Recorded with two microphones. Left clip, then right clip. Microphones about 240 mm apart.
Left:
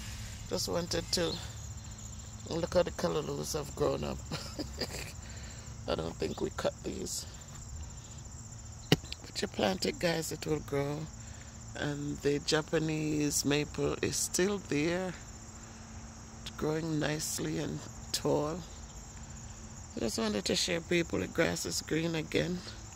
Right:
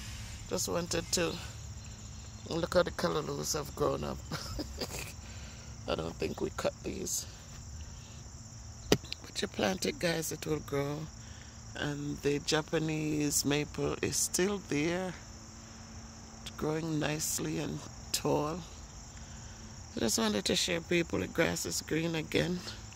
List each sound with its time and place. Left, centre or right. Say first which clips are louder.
0.5 s speech: even; centre
9.1 s speech: even; centre
16.4 s speech: left 1 dB; centre
19.9 s speech: right 2 dB; right